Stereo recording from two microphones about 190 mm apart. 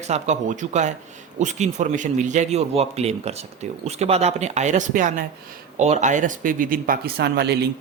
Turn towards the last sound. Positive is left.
turn(degrees=-60)  # may be behind; listen again after turning